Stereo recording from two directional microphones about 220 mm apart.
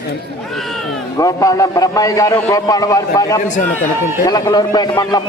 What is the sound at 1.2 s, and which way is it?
A man's voice, 15° left (ahead or behind).